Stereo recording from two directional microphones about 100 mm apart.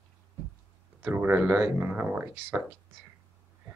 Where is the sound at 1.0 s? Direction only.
20° right (ahead or behind).